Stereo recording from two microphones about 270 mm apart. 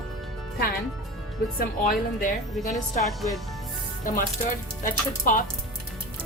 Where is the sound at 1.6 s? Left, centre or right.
Left.